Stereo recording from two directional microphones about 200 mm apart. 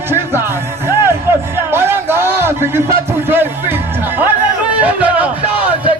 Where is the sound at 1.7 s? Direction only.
10° right (ahead or behind).